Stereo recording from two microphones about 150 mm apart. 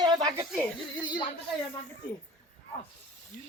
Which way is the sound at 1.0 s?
30° left (ahead or behind).